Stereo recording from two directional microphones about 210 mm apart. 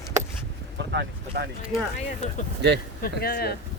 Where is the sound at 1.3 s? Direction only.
50° right (ahead or behind).